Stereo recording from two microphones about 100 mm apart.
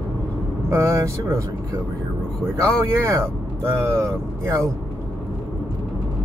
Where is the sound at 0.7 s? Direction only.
30° right (ahead or behind).